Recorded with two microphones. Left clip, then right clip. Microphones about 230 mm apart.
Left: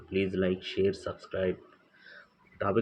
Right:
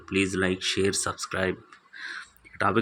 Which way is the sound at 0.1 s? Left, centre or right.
Right.